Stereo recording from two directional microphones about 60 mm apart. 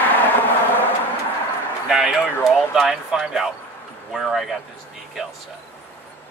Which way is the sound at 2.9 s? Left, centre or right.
Centre.